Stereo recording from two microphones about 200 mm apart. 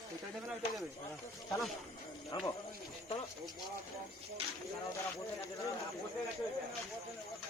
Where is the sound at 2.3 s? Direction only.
20° left (ahead or behind).